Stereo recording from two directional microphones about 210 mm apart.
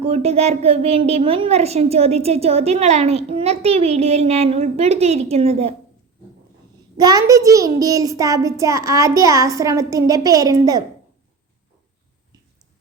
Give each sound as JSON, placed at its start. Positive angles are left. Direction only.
{"t": 0.0, "sound": "a woman's voice", "side_deg": -30}
{"t": 6.9, "sound": "a child's voice", "side_deg": -20}